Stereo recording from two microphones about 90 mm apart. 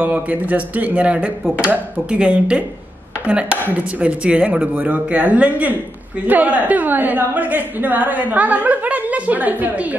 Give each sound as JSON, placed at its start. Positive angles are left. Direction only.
{"t": 0.0, "sound": "a woman's voice", "side_deg": -15}